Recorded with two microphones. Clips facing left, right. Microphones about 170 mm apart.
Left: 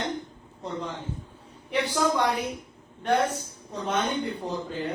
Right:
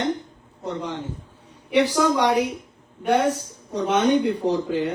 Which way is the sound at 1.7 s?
80° right.